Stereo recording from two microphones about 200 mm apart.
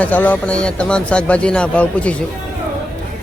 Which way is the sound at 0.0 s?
10° left (ahead or behind).